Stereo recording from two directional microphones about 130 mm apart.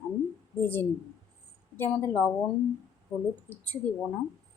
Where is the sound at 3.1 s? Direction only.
10° right (ahead or behind).